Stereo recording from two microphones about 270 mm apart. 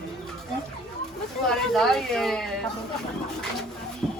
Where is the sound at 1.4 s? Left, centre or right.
Centre.